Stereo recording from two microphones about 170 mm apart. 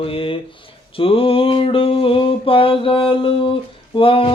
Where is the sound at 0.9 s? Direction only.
30° left (ahead or behind).